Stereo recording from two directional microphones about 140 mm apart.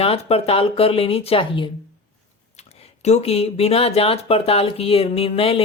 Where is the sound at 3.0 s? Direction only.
50° left (ahead or behind).